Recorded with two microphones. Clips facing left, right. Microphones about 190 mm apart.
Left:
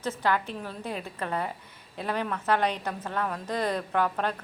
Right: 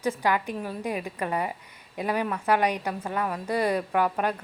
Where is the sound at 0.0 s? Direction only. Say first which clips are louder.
Right 2 dB; 10° right (ahead or behind).